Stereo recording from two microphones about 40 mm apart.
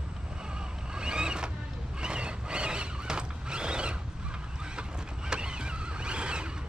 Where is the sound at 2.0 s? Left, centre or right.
Right.